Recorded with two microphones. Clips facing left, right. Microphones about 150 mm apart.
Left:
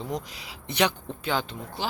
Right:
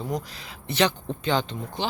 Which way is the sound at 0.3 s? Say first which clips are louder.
Right 3 dB; 15° left (ahead or behind).